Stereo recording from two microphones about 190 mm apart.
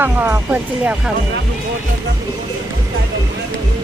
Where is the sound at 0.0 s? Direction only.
10° right (ahead or behind).